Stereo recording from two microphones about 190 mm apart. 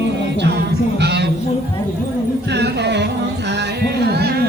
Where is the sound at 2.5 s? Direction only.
65° right (ahead or behind).